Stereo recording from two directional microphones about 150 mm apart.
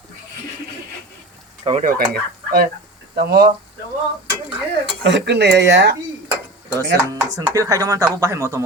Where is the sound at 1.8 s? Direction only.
85° right.